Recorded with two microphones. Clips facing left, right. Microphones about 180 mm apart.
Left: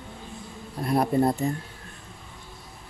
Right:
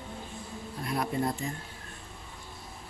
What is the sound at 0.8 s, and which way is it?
Speech, 40° left (ahead or behind).